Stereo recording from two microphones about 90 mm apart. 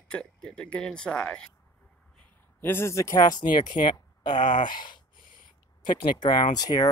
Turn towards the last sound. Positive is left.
turn(degrees=45)  # may be behind; listen again after turning